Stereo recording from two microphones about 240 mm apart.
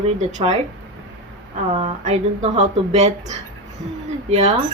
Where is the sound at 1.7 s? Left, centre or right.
Right.